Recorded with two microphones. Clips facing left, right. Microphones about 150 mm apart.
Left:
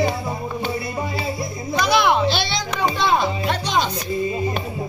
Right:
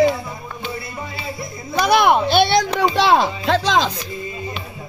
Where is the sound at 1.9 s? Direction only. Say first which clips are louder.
Right 3 dB; 50° right (ahead or behind).